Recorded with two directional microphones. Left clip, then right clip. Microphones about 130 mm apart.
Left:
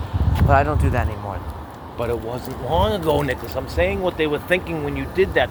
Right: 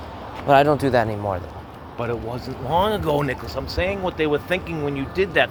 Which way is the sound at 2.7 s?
55° right (ahead or behind).